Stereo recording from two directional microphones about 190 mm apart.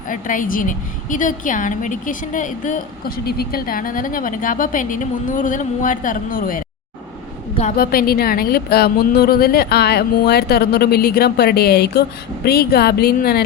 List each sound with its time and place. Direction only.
0.1 s a woman's voice: 45° left (ahead or behind)
3.2 s a woman's voice: 55° left (ahead or behind)
7.8 s a woman's voice: 55° left (ahead or behind)